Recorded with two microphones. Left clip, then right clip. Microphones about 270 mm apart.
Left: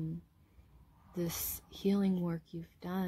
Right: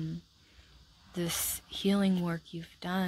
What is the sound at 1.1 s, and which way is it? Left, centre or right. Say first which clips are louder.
Speech: right 5 dB; right.